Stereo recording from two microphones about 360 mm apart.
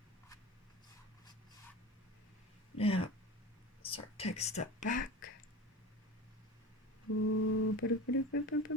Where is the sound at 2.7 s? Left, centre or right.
Centre.